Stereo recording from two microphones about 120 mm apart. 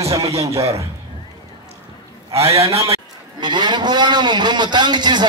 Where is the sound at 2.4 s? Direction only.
55° right (ahead or behind).